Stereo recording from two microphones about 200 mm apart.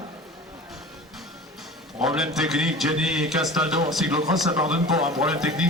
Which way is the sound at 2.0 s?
Centre (ahead or behind).